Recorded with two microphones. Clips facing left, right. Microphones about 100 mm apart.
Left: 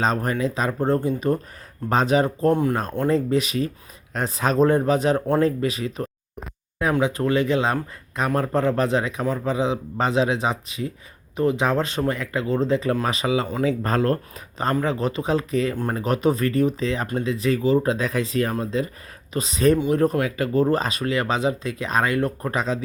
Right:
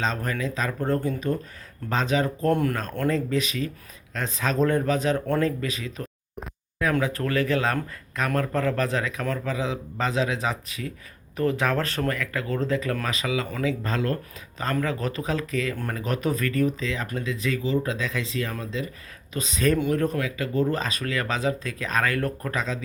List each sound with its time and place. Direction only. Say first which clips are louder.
0.0 s speech: left 5 dB; 40° left (ahead or behind)
0.3 s speech: left 5 dB; 30° left (ahead or behind)
2.5 s speech: left 3 dB; 20° left (ahead or behind)
3.1 s speech: left 4 dB; 35° left (ahead or behind)
6.9 s speech: left 5 dB; 20° left (ahead or behind)